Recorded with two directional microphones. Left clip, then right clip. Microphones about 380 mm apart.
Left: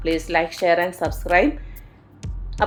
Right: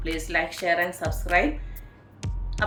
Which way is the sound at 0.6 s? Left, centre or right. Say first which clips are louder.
Left 6 dB; centre.